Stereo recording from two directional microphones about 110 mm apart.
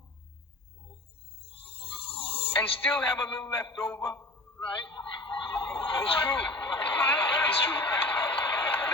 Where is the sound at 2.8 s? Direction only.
15° left (ahead or behind).